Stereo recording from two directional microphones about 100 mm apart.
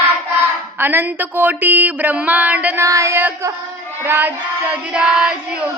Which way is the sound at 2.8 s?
30° right (ahead or behind).